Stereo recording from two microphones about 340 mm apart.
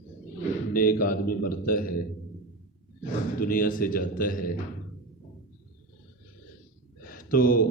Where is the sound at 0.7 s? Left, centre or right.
Left.